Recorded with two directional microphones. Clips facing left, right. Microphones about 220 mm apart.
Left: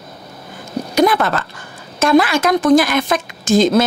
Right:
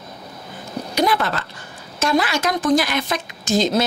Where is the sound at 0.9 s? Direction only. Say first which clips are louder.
Left 6 dB; 50° left (ahead or behind).